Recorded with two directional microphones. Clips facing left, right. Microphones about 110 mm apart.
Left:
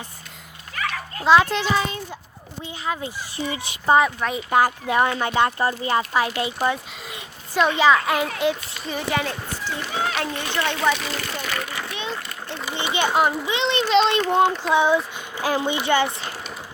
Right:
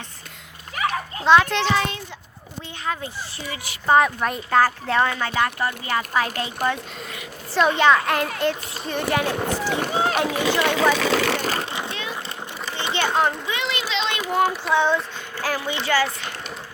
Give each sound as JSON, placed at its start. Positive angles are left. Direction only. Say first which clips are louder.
{"t": 1.2, "sound": "a child's voice", "louder": "even", "side_deg": 5}
{"t": 3.3, "sound": "speech", "louder": "left 5 dB", "side_deg": 25}
{"t": 3.9, "sound": "a child's voice", "louder": "right 1 dB", "side_deg": 0}
{"t": 4.4, "sound": "speech", "louder": "even", "side_deg": 15}
{"t": 6.4, "sound": "speech", "louder": "left 1 dB", "side_deg": 15}
{"t": 7.6, "sound": "a child's voice", "louder": "even", "side_deg": 0}
{"t": 9.4, "sound": "speech", "louder": "right 7 dB", "side_deg": -70}
{"t": 9.9, "sound": "speech", "louder": "right 1 dB", "side_deg": -30}
{"t": 10.2, "sound": "speech", "louder": "right 4 dB", "side_deg": -90}
{"t": 11.4, "sound": "vehicle", "louder": "right 3 dB", "side_deg": -30}
{"t": 12.6, "sound": "a sound", "louder": "left 1 dB", "side_deg": 10}
{"t": 13.5, "sound": "speech", "louder": "left 5 dB", "side_deg": 25}
{"t": 13.9, "sound": "a child's voice", "louder": "left 10 dB", "side_deg": 40}
{"t": 14.3, "sound": "speech", "louder": "left 2 dB", "side_deg": 25}